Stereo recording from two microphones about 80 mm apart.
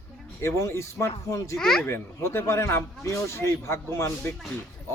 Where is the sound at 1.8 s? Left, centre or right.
Left.